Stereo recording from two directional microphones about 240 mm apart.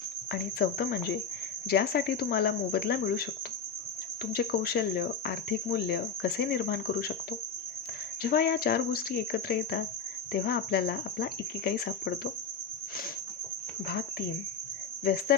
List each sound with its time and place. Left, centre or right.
0.3 s cricket: left
4.3 s cricket: left
8.2 s cricket: left
13.8 s cricket: left